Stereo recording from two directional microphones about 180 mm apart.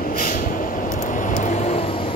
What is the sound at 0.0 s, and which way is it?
Vehicle, 50° left (ahead or behind).